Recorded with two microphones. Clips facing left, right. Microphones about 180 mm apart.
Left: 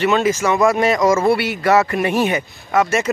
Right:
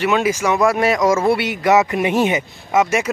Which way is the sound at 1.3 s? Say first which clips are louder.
Even; 20° right (ahead or behind).